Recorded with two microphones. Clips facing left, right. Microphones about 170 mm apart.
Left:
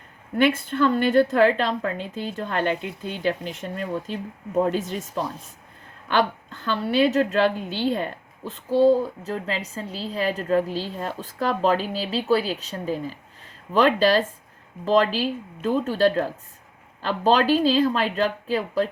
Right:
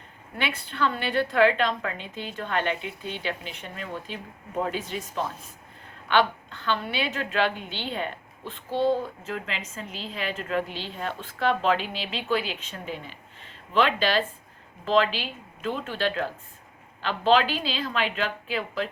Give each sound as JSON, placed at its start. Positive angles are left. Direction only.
{"t": 0.3, "sound": "a woman's voice", "side_deg": 45}